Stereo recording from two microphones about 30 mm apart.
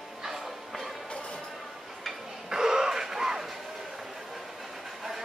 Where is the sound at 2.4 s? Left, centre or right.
Right.